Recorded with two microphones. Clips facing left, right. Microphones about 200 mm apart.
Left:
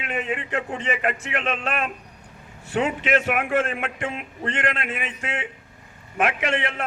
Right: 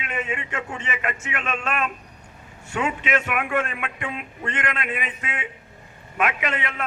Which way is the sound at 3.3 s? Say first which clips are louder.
Left 2 dB; 50° left (ahead or behind).